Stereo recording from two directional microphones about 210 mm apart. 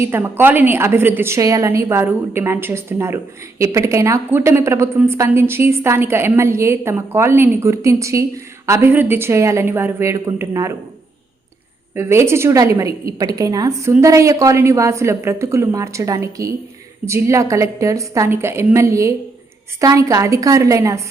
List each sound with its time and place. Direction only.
0.0 s a woman's voice: 10° right (ahead or behind)
11.9 s a woman's voice: 10° right (ahead or behind)